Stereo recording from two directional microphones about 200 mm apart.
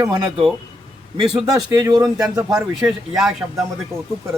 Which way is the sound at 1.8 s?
20° right (ahead or behind).